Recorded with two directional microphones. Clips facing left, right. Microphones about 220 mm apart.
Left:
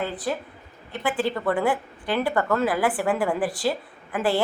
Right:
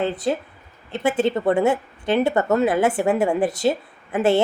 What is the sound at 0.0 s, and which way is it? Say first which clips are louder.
A woman's voice: right 5 dB; 25° right (ahead or behind).